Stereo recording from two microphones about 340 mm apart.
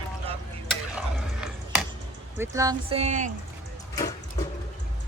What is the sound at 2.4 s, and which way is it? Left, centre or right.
Speech, centre.